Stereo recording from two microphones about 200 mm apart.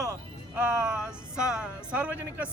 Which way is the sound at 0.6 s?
5° right (ahead or behind).